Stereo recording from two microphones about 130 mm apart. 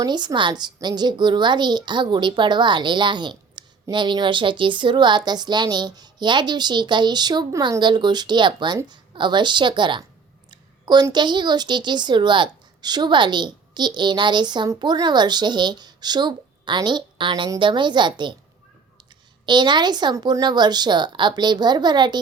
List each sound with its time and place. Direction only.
0.0 s a woman's voice: 30° right (ahead or behind)
19.5 s a woman's voice: 35° right (ahead or behind)